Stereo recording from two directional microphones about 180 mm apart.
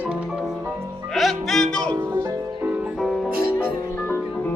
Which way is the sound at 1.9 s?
15° right (ahead or behind).